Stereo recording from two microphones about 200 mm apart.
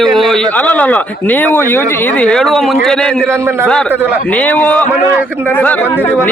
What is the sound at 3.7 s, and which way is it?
Speech, 5° left (ahead or behind).